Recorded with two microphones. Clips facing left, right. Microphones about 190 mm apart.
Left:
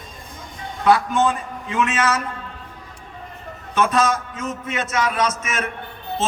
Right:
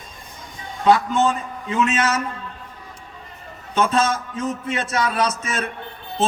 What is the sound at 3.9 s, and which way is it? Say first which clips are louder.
A man's voice: left 1 dB; 30° right (ahead or behind).